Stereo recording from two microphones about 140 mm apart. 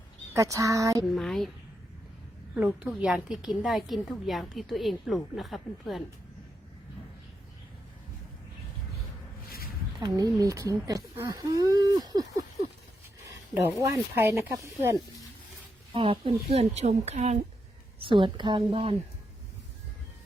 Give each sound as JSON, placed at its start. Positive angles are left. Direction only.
{"t": 0.3, "sound": "speech", "side_deg": -25}
{"t": 1.1, "sound": "a woman's voice", "side_deg": 0}
{"t": 2.6, "sound": "a woman's voice", "side_deg": -10}
{"t": 10.0, "sound": "speech", "side_deg": -25}
{"t": 13.5, "sound": "speech", "side_deg": -20}
{"t": 16.0, "sound": "speech", "side_deg": -40}
{"t": 18.0, "sound": "a woman's voice", "side_deg": -35}